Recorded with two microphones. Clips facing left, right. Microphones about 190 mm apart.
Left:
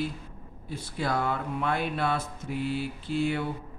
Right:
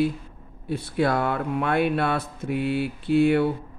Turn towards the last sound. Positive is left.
turn(degrees=-60)  # may be behind; listen again after turning